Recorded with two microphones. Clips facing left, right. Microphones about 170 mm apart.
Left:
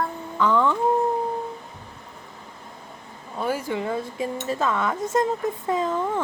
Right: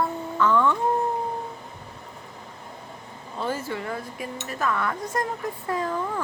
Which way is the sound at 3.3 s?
10° left (ahead or behind).